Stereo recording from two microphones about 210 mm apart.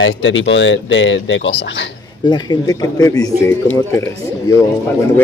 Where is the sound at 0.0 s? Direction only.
65° left (ahead or behind).